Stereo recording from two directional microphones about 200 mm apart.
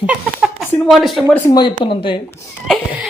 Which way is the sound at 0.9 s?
Centre (ahead or behind).